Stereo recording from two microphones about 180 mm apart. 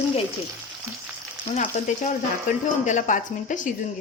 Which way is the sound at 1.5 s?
40° left (ahead or behind).